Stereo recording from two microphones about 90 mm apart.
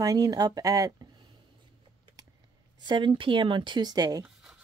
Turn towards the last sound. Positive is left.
turn(degrees=-45)  # may be behind; listen again after turning